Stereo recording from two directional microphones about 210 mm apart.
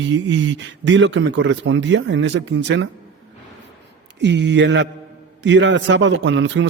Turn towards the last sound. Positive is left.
turn(degrees=-60)  # may be behind; listen again after turning